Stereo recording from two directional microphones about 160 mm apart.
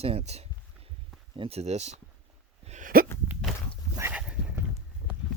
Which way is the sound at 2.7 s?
55° right (ahead or behind).